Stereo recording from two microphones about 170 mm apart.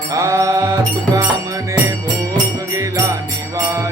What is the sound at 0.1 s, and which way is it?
Music, 20° right (ahead or behind).